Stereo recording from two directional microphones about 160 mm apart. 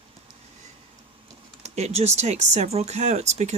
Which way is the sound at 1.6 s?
40° right (ahead or behind).